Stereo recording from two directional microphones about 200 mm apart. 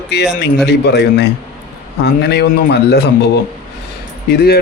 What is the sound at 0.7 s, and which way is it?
A man's voice, 55° left (ahead or behind).